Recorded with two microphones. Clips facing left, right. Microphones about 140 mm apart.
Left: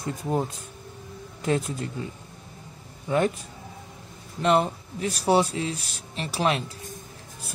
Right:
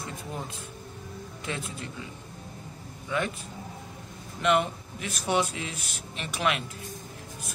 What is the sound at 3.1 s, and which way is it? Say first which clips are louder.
Speech: left 6 dB; 40° left (ahead or behind).